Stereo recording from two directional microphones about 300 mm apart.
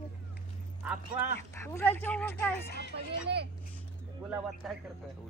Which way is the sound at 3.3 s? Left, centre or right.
Right.